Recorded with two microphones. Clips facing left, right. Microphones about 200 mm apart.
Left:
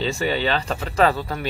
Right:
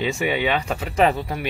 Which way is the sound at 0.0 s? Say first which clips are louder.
Even; 10° right (ahead or behind).